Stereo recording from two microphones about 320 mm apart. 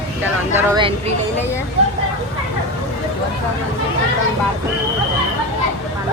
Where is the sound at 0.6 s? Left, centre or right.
Centre.